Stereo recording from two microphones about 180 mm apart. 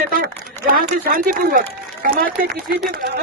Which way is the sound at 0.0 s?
50° right (ahead or behind).